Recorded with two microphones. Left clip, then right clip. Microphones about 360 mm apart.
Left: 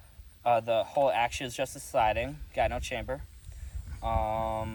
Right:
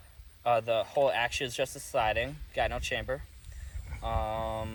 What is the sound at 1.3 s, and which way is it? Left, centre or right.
Speech, centre.